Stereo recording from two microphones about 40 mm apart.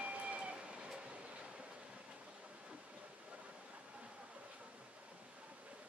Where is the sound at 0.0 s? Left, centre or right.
Right.